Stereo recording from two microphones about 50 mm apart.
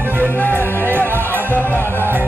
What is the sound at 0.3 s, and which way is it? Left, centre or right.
Music, left.